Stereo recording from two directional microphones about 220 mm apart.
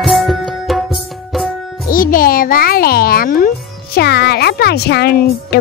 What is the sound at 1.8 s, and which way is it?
Music, 40° left (ahead or behind).